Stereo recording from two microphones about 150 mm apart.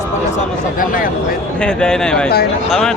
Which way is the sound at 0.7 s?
65° left (ahead or behind).